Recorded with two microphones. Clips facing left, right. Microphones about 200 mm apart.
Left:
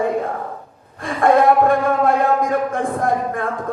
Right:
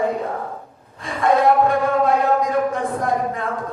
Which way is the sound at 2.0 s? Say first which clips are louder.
Left 1 dB; 50° left (ahead or behind).